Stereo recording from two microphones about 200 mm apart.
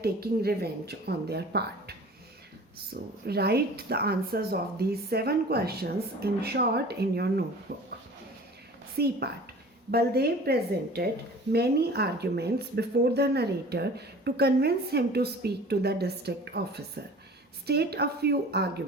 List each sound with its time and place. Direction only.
0.0 s a woman's voice: 50° right (ahead or behind)
3.2 s a woman's voice: 55° right (ahead or behind)
9.0 s a woman's voice: 50° right (ahead or behind)